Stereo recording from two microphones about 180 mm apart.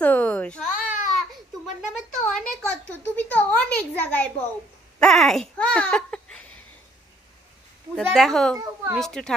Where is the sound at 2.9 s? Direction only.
10° left (ahead or behind).